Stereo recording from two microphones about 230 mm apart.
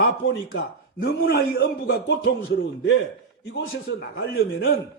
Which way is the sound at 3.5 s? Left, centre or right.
Left.